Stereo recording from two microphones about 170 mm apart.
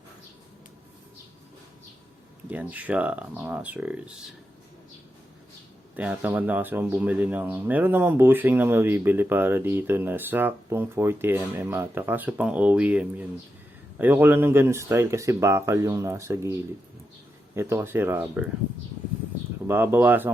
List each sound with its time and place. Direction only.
2.5 s speech: 10° right (ahead or behind)
6.0 s speech: 10° right (ahead or behind)
19.6 s speech: 15° right (ahead or behind)